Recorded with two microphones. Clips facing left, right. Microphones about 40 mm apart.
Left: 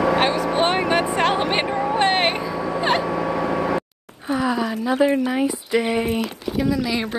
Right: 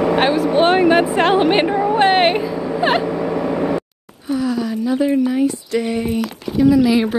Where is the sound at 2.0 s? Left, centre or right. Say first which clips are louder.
Right 6 dB; centre.